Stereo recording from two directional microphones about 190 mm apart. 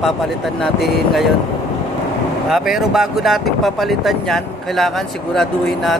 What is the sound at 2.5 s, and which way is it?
Speech, centre (ahead or behind).